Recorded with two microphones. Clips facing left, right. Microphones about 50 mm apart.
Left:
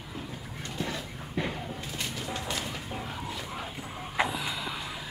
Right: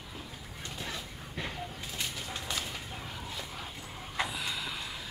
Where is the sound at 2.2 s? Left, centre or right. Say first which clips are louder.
Left 4 dB; centre.